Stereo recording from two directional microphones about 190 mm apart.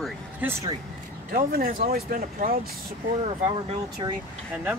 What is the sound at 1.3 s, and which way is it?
Speech, 50° right (ahead or behind).